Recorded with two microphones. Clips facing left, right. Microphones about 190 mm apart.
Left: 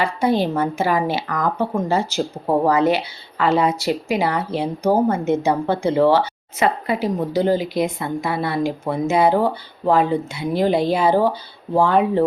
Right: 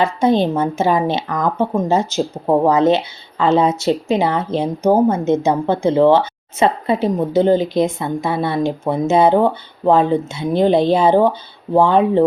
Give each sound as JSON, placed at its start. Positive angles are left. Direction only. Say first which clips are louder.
{"t": 0.0, "sound": "speech", "louder": "right 4 dB", "side_deg": -20}